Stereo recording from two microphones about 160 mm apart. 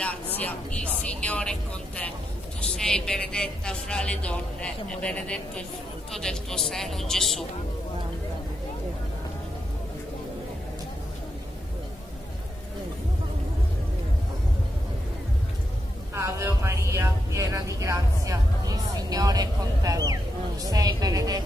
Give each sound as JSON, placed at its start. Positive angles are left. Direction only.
{"t": 0.0, "sound": "a sound", "side_deg": 10}
{"t": 1.0, "sound": "a woman's voice", "side_deg": 10}
{"t": 16.2, "sound": "speech", "side_deg": -20}